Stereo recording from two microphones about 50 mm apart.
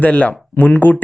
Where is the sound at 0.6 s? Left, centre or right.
Left.